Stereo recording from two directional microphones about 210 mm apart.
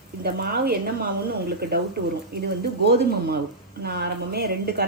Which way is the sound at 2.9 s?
50° right (ahead or behind).